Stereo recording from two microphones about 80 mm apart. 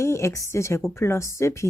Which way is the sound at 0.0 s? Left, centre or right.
Left.